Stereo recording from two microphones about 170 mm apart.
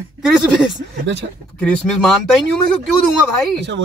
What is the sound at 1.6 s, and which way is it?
Speech, 5° left (ahead or behind).